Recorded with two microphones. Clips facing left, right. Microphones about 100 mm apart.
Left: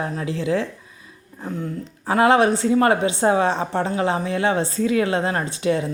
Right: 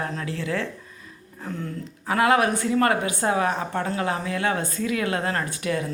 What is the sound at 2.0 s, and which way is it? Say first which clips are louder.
A woman's voice: left 4 dB; 30° left (ahead or behind).